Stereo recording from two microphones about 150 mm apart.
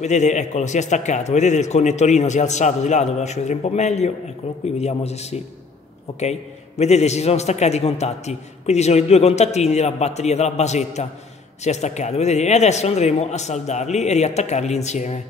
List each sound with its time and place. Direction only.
0.0 s a man's voice: 50° left (ahead or behind)
6.8 s a man's voice: 45° left (ahead or behind)